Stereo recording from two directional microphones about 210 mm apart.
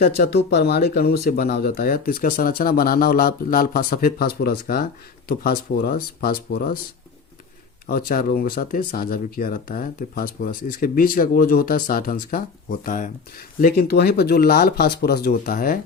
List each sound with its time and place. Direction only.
0.0 s speech: 45° left (ahead or behind)
7.9 s speech: 45° left (ahead or behind)